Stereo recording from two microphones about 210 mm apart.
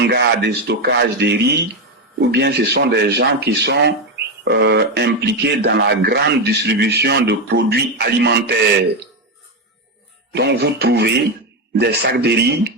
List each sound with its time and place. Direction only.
0.1 s speech: 55° right (ahead or behind)
10.3 s speech: 50° right (ahead or behind)